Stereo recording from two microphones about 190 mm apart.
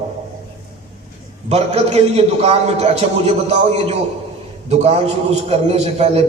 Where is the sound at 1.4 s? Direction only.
35° right (ahead or behind).